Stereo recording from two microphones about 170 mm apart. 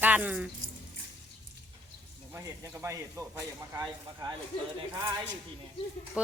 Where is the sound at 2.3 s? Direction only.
15° right (ahead or behind).